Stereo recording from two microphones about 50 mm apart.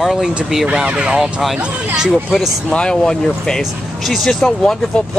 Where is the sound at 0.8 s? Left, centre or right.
Right.